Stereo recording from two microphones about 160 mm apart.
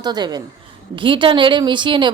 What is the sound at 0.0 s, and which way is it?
A woman's voice, 25° right (ahead or behind).